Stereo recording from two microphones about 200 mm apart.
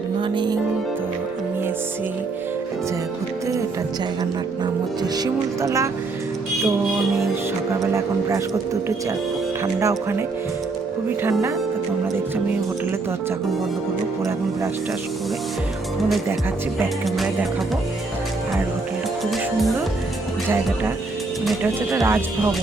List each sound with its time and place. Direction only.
0.2 s speech: 20° right (ahead or behind)
5.1 s speech: 20° right (ahead or behind)
7.7 s speech: 15° right (ahead or behind)
19.2 s music: centre (ahead or behind)
21.6 s speech: 10° right (ahead or behind)